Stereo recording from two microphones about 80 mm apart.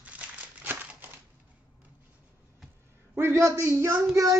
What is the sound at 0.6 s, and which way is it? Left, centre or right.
Crumpling, right.